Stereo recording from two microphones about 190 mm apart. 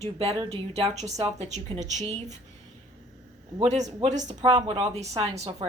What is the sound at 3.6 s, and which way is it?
Speech, 35° right (ahead or behind).